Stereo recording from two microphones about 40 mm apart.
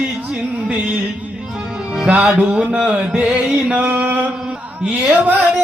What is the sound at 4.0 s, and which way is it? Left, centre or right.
Mantra, right.